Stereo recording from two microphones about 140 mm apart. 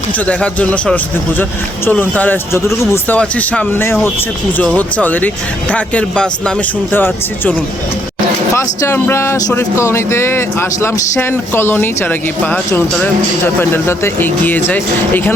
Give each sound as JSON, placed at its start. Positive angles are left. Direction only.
{"t": 0.3, "sound": "speech", "side_deg": 10}
{"t": 8.5, "sound": "speech", "side_deg": 20}